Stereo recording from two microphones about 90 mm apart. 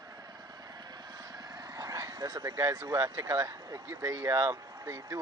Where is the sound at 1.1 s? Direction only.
45° right (ahead or behind).